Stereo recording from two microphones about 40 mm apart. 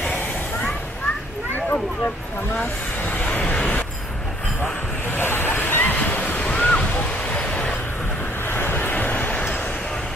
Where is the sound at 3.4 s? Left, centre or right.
Left.